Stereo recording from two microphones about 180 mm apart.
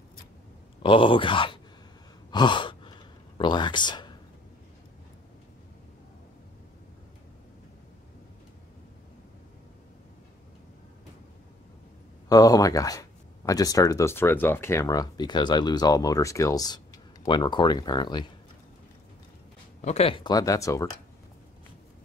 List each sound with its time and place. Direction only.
0.8 s speech: 30° left (ahead or behind)
2.3 s sigh: 25° left (ahead or behind)
12.3 s speech: 20° left (ahead or behind)
19.8 s speech: 35° left (ahead or behind); by 20.9 s 15° left (ahead or behind)